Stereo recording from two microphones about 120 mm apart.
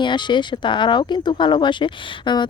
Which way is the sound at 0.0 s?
40° left (ahead or behind).